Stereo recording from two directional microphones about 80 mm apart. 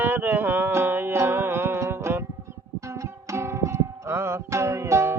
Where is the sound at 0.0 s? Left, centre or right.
Right.